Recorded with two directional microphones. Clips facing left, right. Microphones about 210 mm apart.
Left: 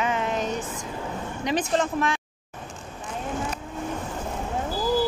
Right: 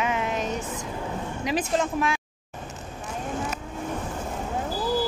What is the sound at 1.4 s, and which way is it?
Speech, 5° right (ahead or behind).